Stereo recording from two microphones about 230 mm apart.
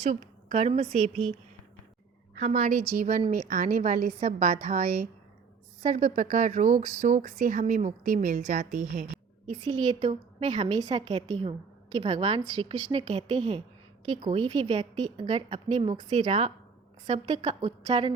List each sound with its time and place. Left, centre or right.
0.1 s a woman's voice: right
2.4 s a woman's voice: right